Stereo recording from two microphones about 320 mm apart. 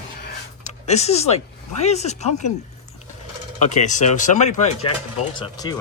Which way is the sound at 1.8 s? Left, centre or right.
Left.